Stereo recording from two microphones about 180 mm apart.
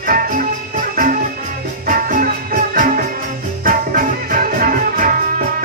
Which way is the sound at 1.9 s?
45° right (ahead or behind).